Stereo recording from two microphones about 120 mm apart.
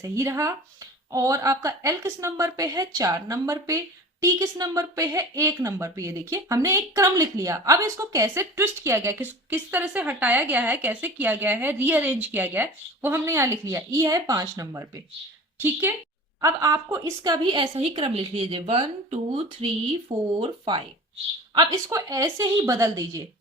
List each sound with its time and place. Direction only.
0.0 s a woman's voice: 25° right (ahead or behind); by 20.8 s 50° right (ahead or behind)
21.5 s speech: 35° right (ahead or behind)